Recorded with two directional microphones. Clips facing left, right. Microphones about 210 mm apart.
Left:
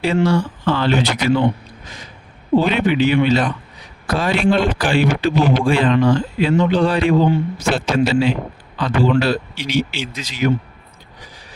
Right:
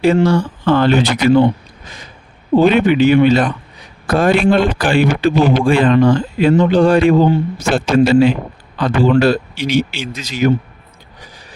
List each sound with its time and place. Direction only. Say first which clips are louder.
0.3 s a man's voice: right 4 dB; 50° right (ahead or behind)
2.6 s a man's voice: right 6 dB; 50° right (ahead or behind)